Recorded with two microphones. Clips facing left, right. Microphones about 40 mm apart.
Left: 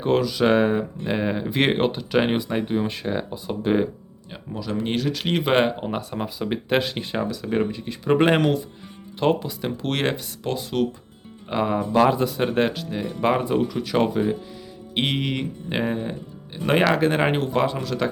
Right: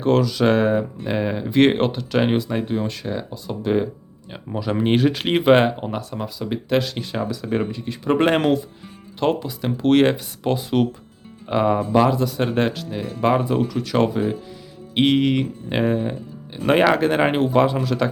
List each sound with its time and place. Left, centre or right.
0.0 s speech: centre
4.5 s speech: right
5.4 s speech: centre
5.9 s speech: centre
7.3 s speech: centre
12.0 s speech: centre
12.4 s speech: centre